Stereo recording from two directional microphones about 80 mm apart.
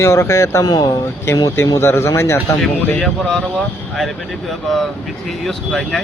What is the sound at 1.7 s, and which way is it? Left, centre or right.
Speech, left.